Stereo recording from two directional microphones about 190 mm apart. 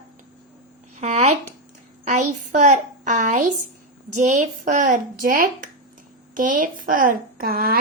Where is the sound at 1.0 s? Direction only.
35° right (ahead or behind).